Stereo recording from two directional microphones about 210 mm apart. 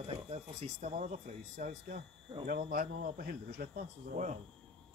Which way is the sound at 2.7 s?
50° right (ahead or behind).